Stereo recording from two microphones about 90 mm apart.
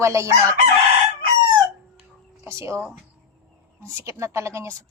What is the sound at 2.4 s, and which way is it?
A woman's voice, 30° right (ahead or behind).